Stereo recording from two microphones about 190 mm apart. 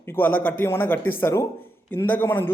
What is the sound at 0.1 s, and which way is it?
Speech, 10° left (ahead or behind).